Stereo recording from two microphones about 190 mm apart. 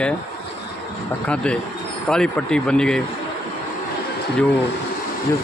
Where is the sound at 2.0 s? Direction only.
5° left (ahead or behind).